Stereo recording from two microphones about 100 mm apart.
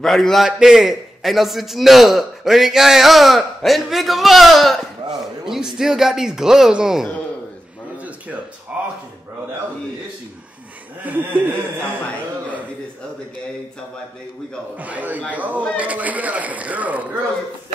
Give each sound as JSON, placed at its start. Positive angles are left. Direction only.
{"t": 0.0, "sound": "a man's voice", "side_deg": 5}
{"t": 11.1, "sound": "a sound", "side_deg": -20}
{"t": 14.8, "sound": "speech", "side_deg": -15}